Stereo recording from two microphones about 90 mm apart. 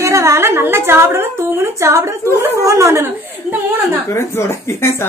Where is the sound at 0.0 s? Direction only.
35° right (ahead or behind).